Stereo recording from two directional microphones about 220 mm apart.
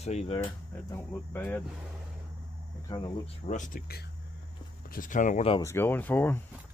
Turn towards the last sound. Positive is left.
turn(degrees=10)  # may be behind; listen again after turning